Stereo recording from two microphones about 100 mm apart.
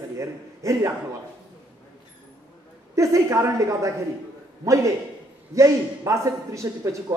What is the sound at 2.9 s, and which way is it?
A man's voice, 30° right (ahead or behind).